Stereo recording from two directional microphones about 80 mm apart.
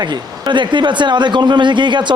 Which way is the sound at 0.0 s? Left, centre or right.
Right.